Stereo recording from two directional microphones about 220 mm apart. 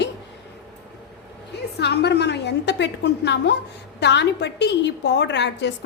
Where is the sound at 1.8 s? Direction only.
50° left (ahead or behind).